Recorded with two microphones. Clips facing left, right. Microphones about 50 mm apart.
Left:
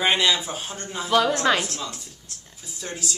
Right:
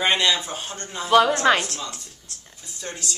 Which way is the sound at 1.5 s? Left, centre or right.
Centre.